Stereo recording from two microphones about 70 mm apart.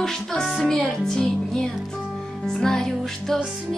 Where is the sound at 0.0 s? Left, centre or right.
Centre.